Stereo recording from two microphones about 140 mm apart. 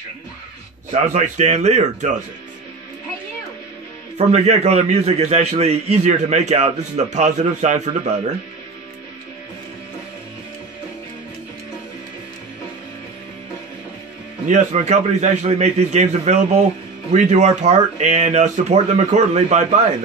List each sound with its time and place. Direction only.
1.0 s speech: 60° right (ahead or behind)
4.3 s a man's voice: 50° right (ahead or behind)
14.5 s a man's voice: 55° right (ahead or behind)